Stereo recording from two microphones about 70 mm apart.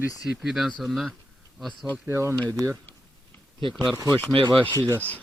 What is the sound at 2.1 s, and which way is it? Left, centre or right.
Speech, right.